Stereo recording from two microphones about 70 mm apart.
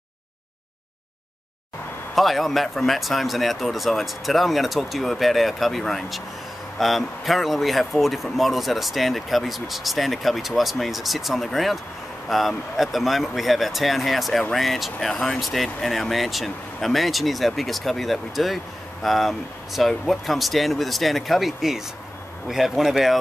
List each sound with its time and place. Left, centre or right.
2.1 s speech: centre